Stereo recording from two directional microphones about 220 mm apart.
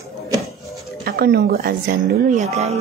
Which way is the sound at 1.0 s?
45° right (ahead or behind).